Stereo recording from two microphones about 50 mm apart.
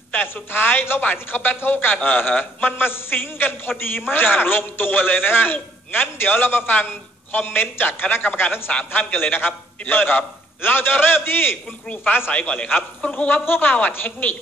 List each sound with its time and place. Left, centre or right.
0.1 s a man's voice: left
12.3 s a woman's voice: left